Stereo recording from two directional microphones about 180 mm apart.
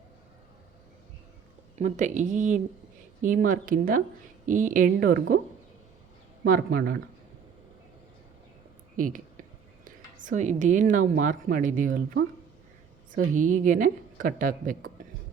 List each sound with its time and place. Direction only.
1.8 s a woman's voice: 40° right (ahead or behind)
6.4 s speech: 55° right (ahead or behind)
9.0 s a woman's voice: 50° right (ahead or behind)